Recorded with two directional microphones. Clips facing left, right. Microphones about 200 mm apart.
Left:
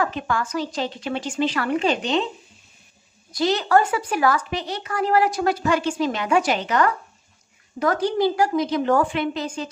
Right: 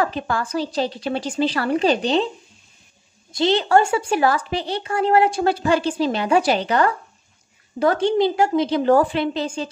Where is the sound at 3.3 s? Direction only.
25° right (ahead or behind).